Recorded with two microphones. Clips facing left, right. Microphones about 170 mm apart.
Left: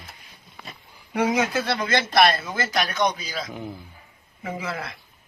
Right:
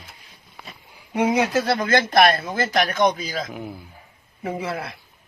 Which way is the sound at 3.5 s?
5° right (ahead or behind).